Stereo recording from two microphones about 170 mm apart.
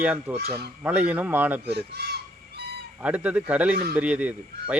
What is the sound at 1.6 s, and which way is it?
Fowl, 70° right (ahead or behind).